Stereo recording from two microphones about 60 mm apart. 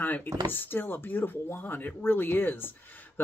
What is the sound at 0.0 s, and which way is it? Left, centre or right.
Speech, left.